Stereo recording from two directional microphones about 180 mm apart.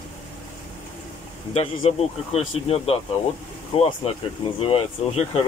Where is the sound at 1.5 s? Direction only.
35° left (ahead or behind).